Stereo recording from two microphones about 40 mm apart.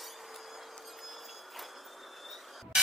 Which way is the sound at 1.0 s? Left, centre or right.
Centre.